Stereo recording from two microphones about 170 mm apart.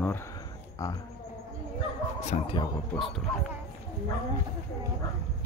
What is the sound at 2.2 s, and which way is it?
Speech, 40° left (ahead or behind).